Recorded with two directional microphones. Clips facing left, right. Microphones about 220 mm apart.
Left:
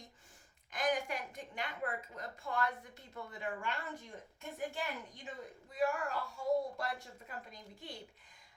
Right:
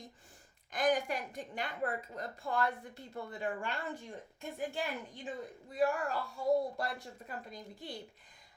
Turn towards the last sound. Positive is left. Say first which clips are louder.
# right 5 dB
turn(degrees=-35)  # may be behind; listen again after turning